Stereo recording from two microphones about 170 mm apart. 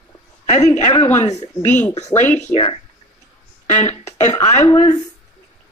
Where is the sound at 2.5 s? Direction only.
30° left (ahead or behind).